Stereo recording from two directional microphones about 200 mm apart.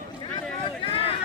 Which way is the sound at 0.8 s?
30° left (ahead or behind).